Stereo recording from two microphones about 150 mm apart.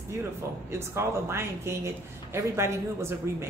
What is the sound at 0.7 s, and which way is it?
Speech, 20° right (ahead or behind).